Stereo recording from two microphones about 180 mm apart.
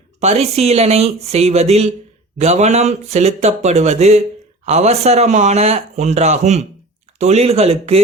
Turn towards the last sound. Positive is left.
turn(degrees=-35)  # may be behind; listen again after turning